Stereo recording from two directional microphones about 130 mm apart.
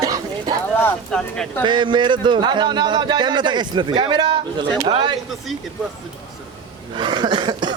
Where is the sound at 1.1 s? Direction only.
5° left (ahead or behind).